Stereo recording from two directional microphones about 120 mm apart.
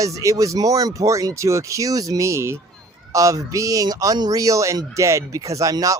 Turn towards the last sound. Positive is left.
turn(degrees=-30)  # may be behind; listen again after turning